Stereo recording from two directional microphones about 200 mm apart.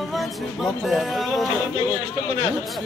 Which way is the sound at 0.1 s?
Centre (ahead or behind).